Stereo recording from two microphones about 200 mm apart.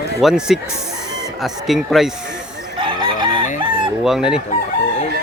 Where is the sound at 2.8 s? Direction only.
25° right (ahead or behind).